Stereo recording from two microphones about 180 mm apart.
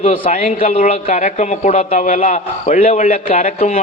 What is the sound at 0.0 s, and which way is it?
A man's voice, 40° left (ahead or behind).